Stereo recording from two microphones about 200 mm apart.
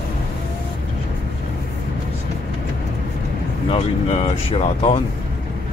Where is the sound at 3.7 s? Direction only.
35° left (ahead or behind).